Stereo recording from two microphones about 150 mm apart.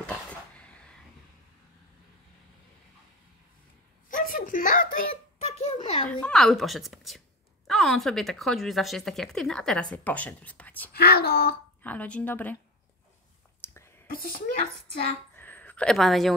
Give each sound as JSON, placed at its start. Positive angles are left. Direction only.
{"t": 0.0, "sound": "a sound", "side_deg": 10}
{"t": 4.1, "sound": "speech", "side_deg": 65}
{"t": 5.1, "sound": "a sound", "side_deg": 40}
{"t": 6.2, "sound": "speech", "side_deg": 5}
{"t": 10.9, "sound": "speech", "side_deg": 90}
{"t": 11.8, "sound": "a woman's voice", "side_deg": 10}
{"t": 13.6, "sound": "whispering", "side_deg": 15}
{"t": 14.0, "sound": "speech", "side_deg": 75}
{"t": 15.3, "sound": "a sound", "side_deg": 10}